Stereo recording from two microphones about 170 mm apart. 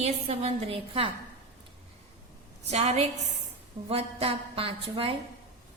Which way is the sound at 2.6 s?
40° right (ahead or behind).